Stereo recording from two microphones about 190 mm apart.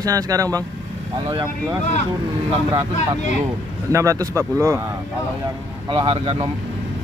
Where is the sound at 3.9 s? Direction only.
15° right (ahead or behind).